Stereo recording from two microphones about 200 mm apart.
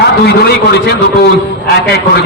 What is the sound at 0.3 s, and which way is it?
A man's voice, 55° left (ahead or behind).